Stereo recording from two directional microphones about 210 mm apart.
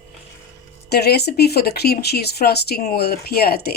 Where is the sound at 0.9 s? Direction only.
50° left (ahead or behind).